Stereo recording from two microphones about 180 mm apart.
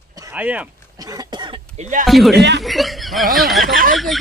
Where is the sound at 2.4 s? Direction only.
70° right (ahead or behind).